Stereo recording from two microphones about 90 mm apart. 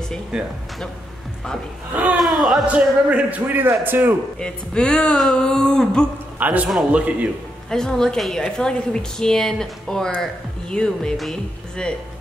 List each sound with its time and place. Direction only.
2.1 s speech: centre (ahead or behind)
2.7 s a man's voice: 15° right (ahead or behind)
4.4 s a woman's voice: 10° left (ahead or behind)
6.3 s a man's voice: 15° right (ahead or behind)
7.7 s a woman's voice: 5° left (ahead or behind)